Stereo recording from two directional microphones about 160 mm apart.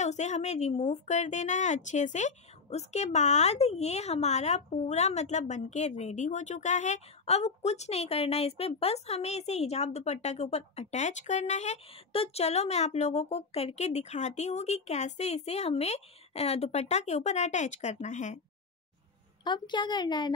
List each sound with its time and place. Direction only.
0.0 s a woman's voice: 45° left (ahead or behind)
19.4 s a woman's voice: 30° left (ahead or behind)